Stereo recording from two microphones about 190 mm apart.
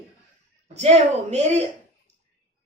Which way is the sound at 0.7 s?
35° right (ahead or behind).